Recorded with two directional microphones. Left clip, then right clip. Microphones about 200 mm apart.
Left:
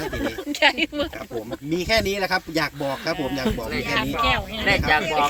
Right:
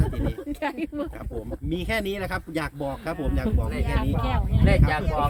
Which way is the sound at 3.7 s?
50° right (ahead or behind).